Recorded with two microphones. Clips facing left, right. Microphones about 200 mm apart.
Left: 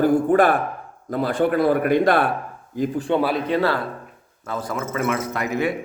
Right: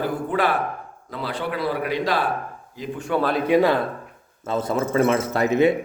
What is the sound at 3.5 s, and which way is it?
Speech, 15° right (ahead or behind).